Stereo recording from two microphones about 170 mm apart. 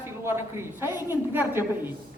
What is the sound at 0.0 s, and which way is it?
A man's voice, 15° right (ahead or behind).